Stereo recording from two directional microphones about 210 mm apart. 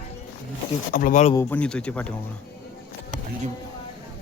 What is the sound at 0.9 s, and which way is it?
Speech, 40° left (ahead or behind).